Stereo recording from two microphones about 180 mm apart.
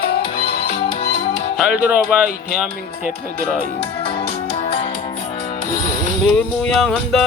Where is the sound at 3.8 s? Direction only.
30° left (ahead or behind).